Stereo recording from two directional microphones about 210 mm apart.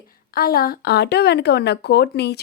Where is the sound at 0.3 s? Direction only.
45° left (ahead or behind).